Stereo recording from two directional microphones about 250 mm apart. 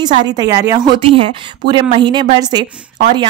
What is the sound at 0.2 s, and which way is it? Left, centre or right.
A woman's voice, centre.